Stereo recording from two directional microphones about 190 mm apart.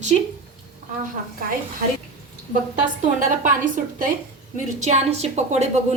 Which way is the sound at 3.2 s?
45° right (ahead or behind).